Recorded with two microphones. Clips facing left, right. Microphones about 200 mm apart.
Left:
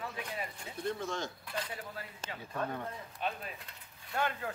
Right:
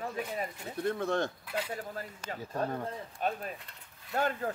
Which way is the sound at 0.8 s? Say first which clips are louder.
Right 6 dB; 60° right (ahead or behind).